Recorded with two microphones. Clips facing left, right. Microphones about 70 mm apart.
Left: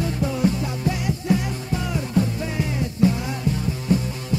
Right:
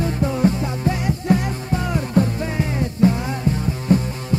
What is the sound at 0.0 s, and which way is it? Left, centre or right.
Music, right.